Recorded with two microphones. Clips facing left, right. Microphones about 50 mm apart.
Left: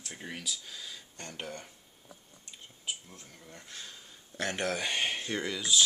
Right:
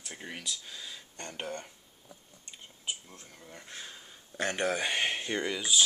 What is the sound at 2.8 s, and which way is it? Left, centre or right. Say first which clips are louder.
Speech: right 1 dB; centre.